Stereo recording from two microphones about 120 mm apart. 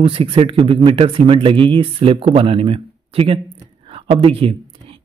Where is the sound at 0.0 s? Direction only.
50° right (ahead or behind).